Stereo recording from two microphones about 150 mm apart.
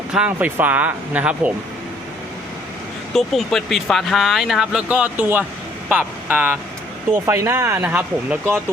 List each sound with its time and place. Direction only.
0.1 s speech: 10° right (ahead or behind)
3.2 s speech: centre (ahead or behind)